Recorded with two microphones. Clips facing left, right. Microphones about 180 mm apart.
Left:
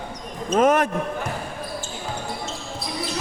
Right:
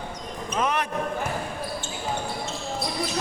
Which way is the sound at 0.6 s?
45° left (ahead or behind).